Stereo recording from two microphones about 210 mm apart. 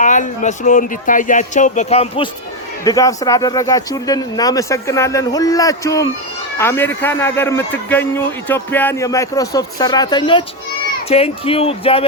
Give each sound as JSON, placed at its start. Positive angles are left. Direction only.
{"t": 0.0, "sound": "speech", "side_deg": 35}
{"t": 2.8, "sound": "a man's voice", "side_deg": 15}